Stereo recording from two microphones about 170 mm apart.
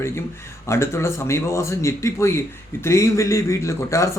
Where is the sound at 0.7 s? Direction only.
15° left (ahead or behind).